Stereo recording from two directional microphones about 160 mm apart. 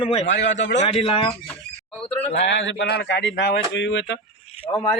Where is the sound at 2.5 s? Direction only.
90° left.